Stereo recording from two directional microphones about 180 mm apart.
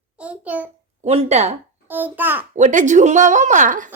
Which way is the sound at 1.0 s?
35° right (ahead or behind).